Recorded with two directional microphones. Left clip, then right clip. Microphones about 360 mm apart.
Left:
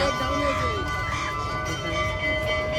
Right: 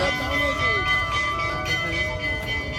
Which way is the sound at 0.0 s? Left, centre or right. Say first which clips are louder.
Right 1 dB; centre.